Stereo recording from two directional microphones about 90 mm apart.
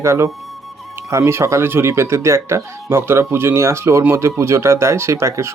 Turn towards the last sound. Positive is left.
turn(degrees=-35)  # may be behind; listen again after turning